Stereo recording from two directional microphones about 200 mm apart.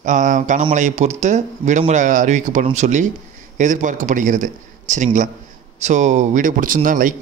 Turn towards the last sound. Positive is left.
turn(degrees=-40)  # may be behind; listen again after turning